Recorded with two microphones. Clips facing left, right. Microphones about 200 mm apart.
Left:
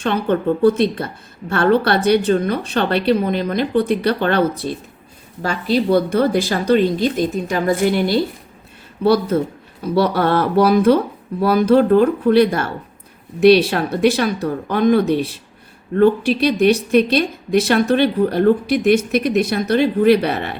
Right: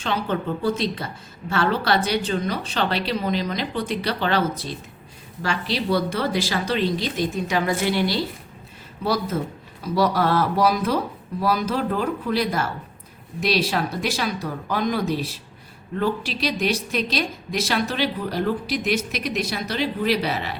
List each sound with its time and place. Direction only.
0.0 s a woman's voice: 60° left (ahead or behind)